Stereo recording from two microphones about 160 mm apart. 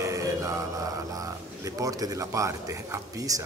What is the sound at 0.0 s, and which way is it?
Mantra, 20° right (ahead or behind).